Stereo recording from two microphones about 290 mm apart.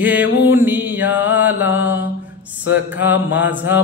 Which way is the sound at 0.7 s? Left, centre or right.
Centre.